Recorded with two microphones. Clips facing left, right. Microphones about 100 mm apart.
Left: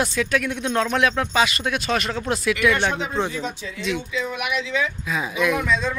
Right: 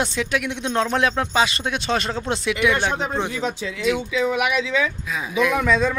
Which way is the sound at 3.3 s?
85° right.